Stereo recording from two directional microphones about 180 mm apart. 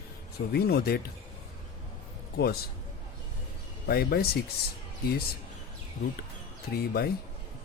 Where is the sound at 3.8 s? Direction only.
60° left (ahead or behind).